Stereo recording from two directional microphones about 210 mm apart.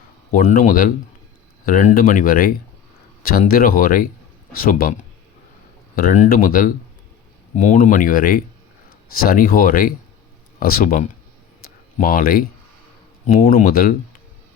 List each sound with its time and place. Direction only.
0.5 s speech: 40° left (ahead or behind)
6.0 s speech: 40° left (ahead or behind)